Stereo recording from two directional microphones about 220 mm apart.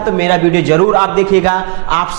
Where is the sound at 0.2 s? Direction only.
15° right (ahead or behind).